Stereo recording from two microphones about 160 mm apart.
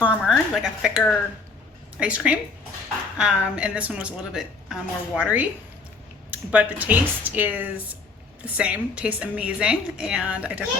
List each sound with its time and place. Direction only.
0.0 s a woman's voice: 5° right (ahead or behind)
6.5 s a woman's voice: 10° right (ahead or behind)